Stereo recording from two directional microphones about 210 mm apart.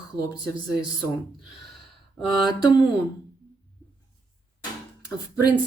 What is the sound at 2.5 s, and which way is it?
Speech, 20° left (ahead or behind).